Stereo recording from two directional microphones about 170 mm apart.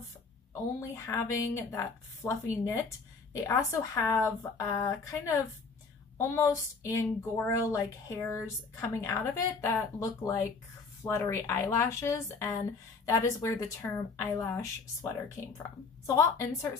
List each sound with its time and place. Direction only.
0.7 s speech: 15° left (ahead or behind)